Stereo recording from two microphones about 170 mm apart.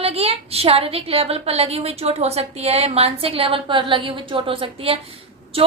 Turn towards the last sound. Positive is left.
turn(degrees=-35)  # may be behind; listen again after turning